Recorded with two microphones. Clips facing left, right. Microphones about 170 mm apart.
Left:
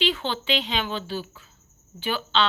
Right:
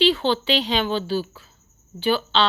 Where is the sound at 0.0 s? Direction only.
35° right (ahead or behind).